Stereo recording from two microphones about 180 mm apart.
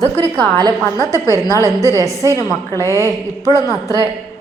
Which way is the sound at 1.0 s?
20° left (ahead or behind).